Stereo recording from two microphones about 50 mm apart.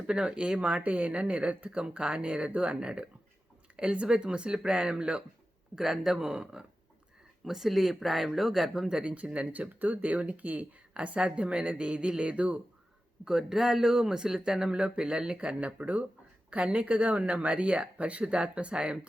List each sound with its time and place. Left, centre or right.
0.1 s speech: centre
5.7 s speech: centre
9.1 s speech: right
13.2 s speech: centre